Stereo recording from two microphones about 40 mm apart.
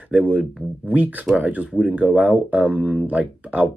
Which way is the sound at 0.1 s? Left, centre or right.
Right.